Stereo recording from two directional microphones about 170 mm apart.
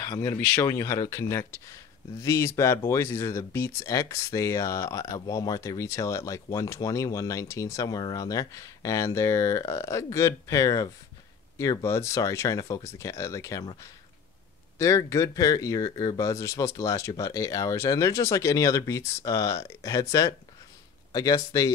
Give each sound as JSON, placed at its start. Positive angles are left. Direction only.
{"t": 0.0, "sound": "speech", "side_deg": 15}
{"t": 14.8, "sound": "speech", "side_deg": 15}